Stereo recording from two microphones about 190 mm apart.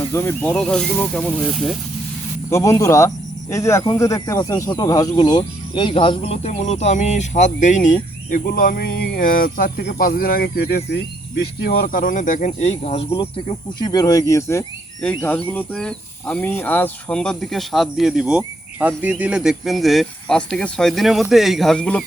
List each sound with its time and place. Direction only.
0.1 s speech: 15° left (ahead or behind)
2.5 s speech: 15° left (ahead or behind)